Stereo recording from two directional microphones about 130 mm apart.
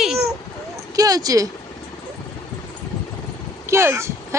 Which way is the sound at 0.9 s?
30° right (ahead or behind).